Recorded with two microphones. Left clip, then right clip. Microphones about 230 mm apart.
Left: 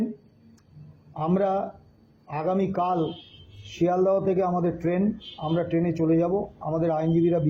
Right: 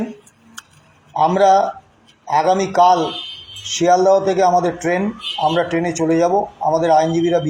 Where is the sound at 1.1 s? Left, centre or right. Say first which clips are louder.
Right 12 dB; right.